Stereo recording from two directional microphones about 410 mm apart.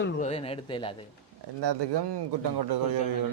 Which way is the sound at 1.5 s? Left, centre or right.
Right.